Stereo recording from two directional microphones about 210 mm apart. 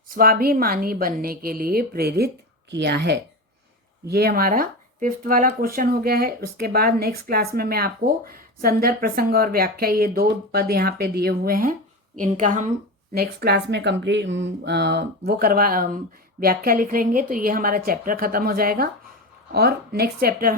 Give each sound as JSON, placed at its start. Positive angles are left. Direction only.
{"t": 0.1, "sound": "a woman's voice", "side_deg": -45}
{"t": 13.1, "sound": "speech", "side_deg": -50}